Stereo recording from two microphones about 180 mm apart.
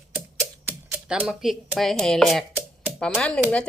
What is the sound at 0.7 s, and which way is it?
Speech, 5° right (ahead or behind).